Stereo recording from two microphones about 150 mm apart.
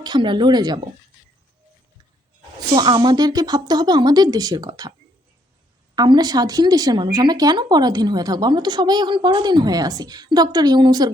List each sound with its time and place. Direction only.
0.0 s speech: 30° right (ahead or behind)
2.6 s speech: 30° right (ahead or behind)
6.0 s speech: 25° right (ahead or behind)